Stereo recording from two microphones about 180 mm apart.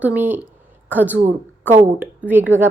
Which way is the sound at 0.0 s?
10° right (ahead or behind).